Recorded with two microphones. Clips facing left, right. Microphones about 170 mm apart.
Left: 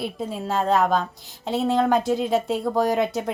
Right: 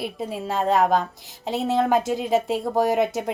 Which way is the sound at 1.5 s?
20° right (ahead or behind).